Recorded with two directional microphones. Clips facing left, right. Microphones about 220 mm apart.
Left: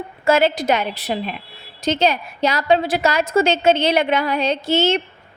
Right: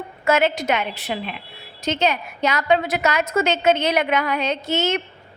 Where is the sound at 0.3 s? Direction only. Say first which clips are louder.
Left 3 dB; 30° left (ahead or behind).